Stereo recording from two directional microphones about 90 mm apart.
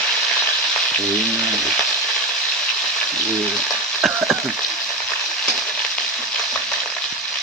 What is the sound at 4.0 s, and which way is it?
Frying, centre (ahead or behind).